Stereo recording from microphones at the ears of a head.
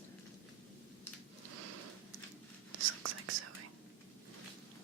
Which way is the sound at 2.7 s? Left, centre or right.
Right.